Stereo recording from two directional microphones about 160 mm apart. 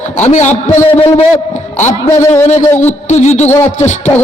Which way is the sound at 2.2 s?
20° left (ahead or behind).